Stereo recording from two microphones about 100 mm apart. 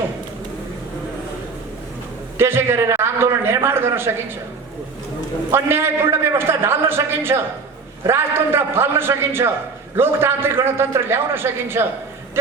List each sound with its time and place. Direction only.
2.4 s a man's voice: 25° right (ahead or behind)
5.5 s a man's voice: 25° right (ahead or behind)